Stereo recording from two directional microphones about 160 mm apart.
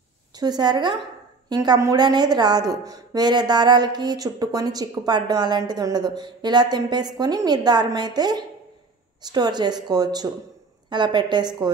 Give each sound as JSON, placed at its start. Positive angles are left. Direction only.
{"t": 0.4, "sound": "a woman's voice", "side_deg": -25}